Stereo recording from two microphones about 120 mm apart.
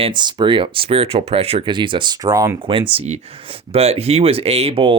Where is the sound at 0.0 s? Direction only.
40° right (ahead or behind).